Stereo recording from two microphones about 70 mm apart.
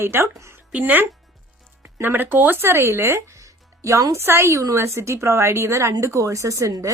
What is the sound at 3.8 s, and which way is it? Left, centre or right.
Speech, right.